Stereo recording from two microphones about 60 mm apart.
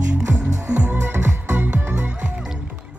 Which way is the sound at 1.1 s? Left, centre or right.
Right.